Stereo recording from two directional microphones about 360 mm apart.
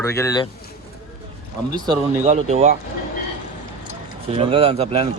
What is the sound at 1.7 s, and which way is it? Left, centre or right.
Speech, centre.